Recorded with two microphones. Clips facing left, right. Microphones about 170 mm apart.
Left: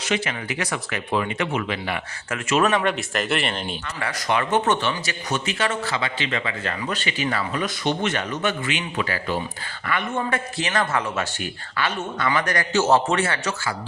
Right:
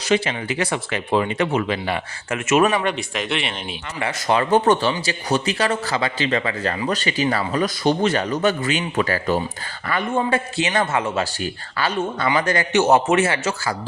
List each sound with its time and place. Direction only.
0.0 s speech: 30° right (ahead or behind)
2.6 s speech: 5° right (ahead or behind)
4.0 s speech: 30° right (ahead or behind)
9.8 s speech: 35° right (ahead or behind)